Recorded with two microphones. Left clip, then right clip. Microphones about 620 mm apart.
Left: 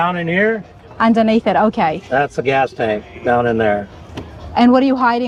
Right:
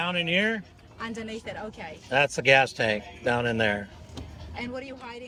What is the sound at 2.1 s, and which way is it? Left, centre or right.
Speech, right.